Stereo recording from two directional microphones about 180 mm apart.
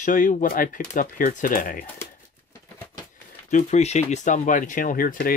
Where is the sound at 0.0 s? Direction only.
45° left (ahead or behind).